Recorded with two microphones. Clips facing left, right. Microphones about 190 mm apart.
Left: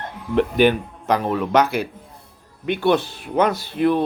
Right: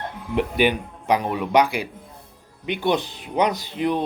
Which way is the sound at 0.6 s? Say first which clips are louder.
Left 4 dB; 10° right (ahead or behind).